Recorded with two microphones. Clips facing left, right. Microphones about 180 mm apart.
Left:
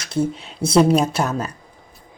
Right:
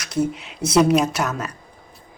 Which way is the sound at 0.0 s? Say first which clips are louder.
Left 1 dB; 30° left (ahead or behind).